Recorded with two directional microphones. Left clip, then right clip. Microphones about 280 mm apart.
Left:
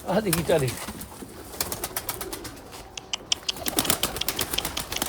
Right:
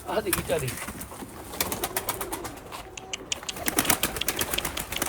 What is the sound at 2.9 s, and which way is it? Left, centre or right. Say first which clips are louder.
Pigeon: left 6 dB; centre.